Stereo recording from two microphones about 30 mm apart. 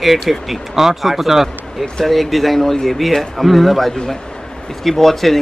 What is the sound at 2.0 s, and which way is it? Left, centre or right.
Speech, centre.